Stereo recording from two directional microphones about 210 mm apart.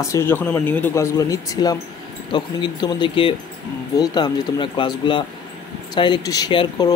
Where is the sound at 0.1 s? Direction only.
10° left (ahead or behind).